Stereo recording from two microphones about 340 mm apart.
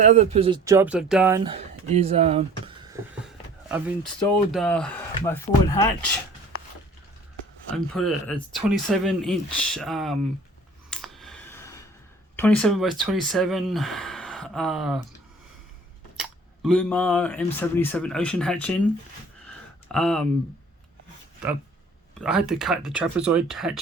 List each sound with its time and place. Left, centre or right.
0.0 s speech: centre
1.5 s speech: centre
3.2 s speech: centre
7.9 s speech: centre
10.8 s a sound: centre
12.4 s speech: centre
16.6 s speech: centre
19.5 s a sound: centre
22.2 s speech: centre